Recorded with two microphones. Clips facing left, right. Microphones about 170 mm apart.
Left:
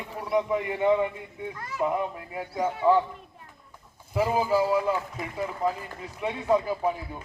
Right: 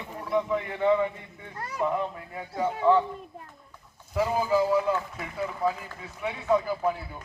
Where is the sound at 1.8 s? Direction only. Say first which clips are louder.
Left 1 dB; 10° left (ahead or behind).